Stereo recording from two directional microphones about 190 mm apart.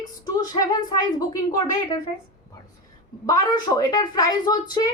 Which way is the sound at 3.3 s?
20° left (ahead or behind).